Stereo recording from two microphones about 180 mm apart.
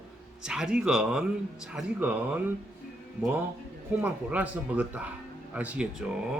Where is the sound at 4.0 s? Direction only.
10° right (ahead or behind).